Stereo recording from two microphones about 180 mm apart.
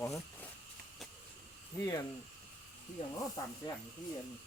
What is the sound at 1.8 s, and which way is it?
Speech, 20° left (ahead or behind).